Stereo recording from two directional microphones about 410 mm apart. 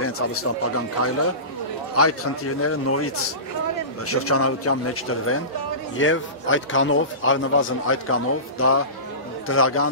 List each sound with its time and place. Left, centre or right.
0.0 s a man's voice: left